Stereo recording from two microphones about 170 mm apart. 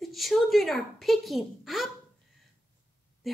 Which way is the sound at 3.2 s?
Centre (ahead or behind).